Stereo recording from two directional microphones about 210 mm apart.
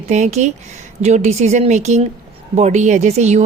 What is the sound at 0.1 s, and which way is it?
Speech, 35° right (ahead or behind).